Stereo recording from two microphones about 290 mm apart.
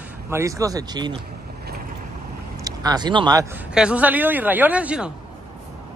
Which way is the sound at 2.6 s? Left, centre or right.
Centre.